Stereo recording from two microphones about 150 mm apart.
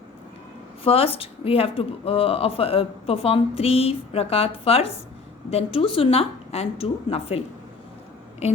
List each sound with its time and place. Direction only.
0.9 s a woman's voice: 40° left (ahead or behind)